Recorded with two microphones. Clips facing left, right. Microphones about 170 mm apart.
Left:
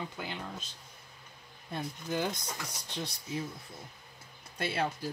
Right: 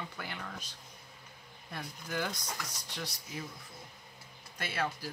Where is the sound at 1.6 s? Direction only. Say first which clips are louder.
Left 6 dB; 25° left (ahead or behind).